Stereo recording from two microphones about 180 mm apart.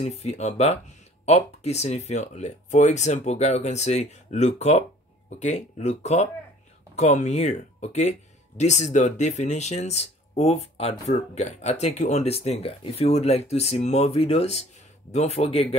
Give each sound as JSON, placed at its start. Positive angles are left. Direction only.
{"t": 0.0, "sound": "speech", "side_deg": 35}